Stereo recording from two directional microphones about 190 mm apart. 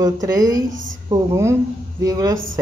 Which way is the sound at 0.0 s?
20° right (ahead or behind).